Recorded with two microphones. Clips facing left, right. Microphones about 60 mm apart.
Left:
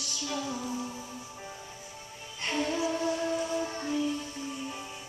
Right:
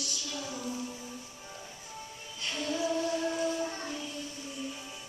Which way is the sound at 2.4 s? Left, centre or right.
Left.